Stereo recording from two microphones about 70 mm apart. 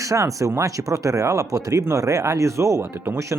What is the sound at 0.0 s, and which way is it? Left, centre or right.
Speech, right.